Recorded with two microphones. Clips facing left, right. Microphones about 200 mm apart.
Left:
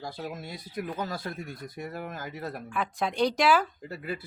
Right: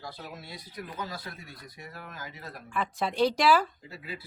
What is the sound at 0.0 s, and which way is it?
Speech, 50° left (ahead or behind).